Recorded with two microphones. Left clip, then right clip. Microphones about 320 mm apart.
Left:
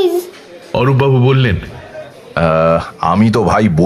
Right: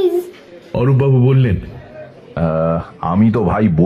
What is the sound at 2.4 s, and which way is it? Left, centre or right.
Speech, left.